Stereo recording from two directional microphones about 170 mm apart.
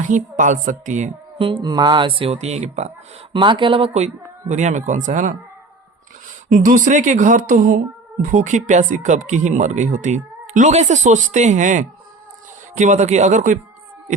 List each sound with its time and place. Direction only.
0.0 s speech: 50° right (ahead or behind)
1.4 s speech: 30° right (ahead or behind)
3.3 s speech: 30° right (ahead or behind); by 13.6 s 45° right (ahead or behind)